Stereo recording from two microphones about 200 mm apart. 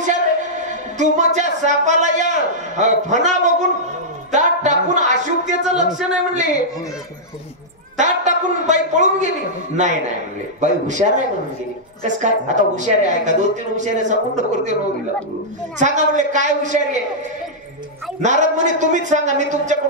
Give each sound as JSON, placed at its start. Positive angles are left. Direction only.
{"t": 0.0, "sound": "a man's voice", "side_deg": -35}
{"t": 8.0, "sound": "a man's voice", "side_deg": -35}
{"t": 15.8, "sound": "a woman's voice", "side_deg": -35}
{"t": 18.2, "sound": "a woman's voice", "side_deg": -35}